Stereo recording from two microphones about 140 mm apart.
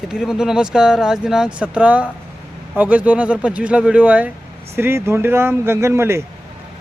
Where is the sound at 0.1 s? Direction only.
5° right (ahead or behind).